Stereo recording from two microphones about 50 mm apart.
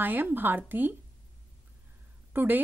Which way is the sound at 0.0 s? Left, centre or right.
Right.